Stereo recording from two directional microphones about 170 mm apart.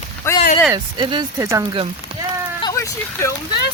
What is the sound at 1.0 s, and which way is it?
Speech, 30° right (ahead or behind).